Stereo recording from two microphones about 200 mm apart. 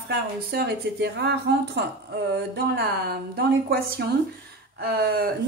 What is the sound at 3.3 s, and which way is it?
Speech, 50° right (ahead or behind).